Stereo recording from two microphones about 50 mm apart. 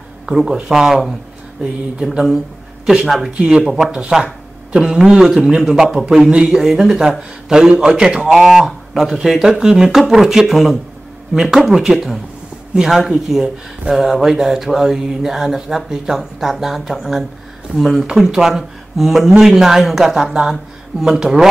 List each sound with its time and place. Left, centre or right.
0.4 s speech: centre
3.3 s speech: centre
3.6 s a man's voice: centre
5.2 s a man's voice: centre